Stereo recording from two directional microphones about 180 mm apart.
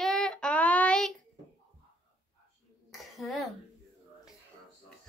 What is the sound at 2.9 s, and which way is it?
Cough, centre (ahead or behind).